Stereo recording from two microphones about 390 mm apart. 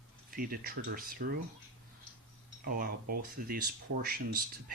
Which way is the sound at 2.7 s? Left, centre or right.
Right.